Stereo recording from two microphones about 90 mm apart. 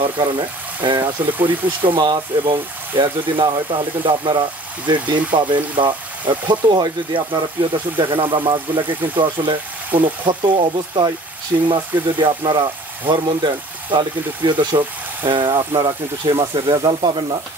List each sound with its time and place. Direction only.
0.8 s speech: 65° right (ahead or behind)
16.5 s sizzle: 60° right (ahead or behind)